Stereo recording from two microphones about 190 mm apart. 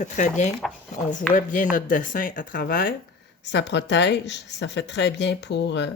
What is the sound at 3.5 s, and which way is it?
Speech, 70° left (ahead or behind).